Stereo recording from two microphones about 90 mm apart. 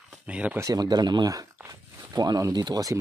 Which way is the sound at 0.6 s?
45° right (ahead or behind).